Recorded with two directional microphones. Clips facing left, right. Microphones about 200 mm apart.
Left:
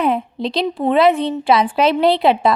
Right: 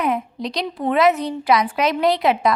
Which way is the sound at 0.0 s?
30° left (ahead or behind).